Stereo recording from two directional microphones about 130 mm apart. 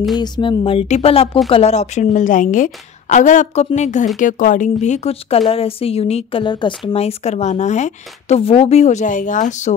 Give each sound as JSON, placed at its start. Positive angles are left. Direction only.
{"t": 0.2, "sound": "speech", "side_deg": 40}
{"t": 0.8, "sound": "a woman's voice", "side_deg": 55}
{"t": 4.2, "sound": "a woman's voice", "side_deg": 90}
{"t": 6.4, "sound": "speech", "side_deg": 35}
{"t": 6.9, "sound": "speech", "side_deg": 50}